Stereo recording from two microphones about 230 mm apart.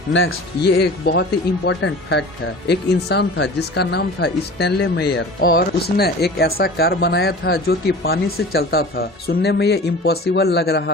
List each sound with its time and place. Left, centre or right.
0.1 s speech: left